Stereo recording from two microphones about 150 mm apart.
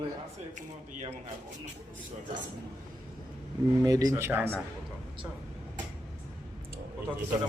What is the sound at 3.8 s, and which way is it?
Speech, 25° right (ahead or behind).